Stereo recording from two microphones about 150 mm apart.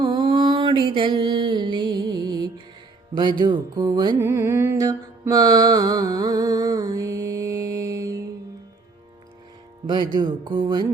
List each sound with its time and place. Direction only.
0.0 s mantra: 35° right (ahead or behind)
3.2 s speech: 30° right (ahead or behind)
4.2 s mantra: 20° right (ahead or behind)
10.2 s speech: 30° right (ahead or behind)